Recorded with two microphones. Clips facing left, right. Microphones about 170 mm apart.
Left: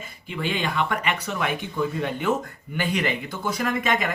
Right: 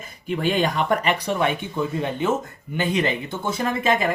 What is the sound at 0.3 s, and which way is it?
Speech, 40° right (ahead or behind).